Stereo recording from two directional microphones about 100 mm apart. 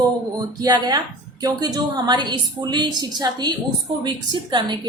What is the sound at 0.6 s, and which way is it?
A woman's voice, 45° right (ahead or behind).